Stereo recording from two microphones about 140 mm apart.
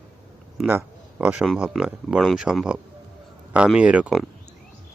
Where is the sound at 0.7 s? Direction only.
10° right (ahead or behind).